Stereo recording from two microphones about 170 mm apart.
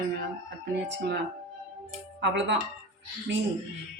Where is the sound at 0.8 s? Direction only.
90° right.